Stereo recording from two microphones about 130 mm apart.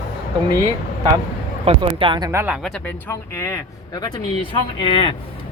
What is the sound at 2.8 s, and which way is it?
Speech, 20° left (ahead or behind).